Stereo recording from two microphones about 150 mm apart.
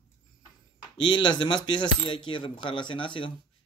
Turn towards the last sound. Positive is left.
turn(degrees=35)  # may be behind; listen again after turning